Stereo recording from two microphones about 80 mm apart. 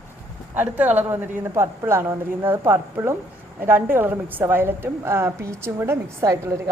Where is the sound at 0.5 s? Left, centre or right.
Right.